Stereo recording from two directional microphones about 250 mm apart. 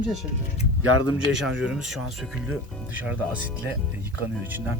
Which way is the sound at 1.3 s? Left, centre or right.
Centre.